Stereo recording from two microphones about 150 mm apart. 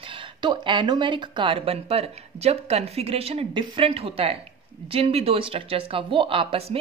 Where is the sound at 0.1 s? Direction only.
30° right (ahead or behind).